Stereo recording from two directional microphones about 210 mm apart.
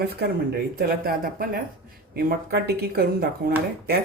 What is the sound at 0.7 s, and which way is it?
Speech, 45° right (ahead or behind).